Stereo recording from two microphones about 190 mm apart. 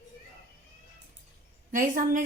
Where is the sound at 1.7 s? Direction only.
45° right (ahead or behind).